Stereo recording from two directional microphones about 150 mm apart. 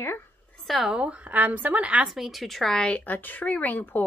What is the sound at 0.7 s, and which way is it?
A woman's voice, centre (ahead or behind).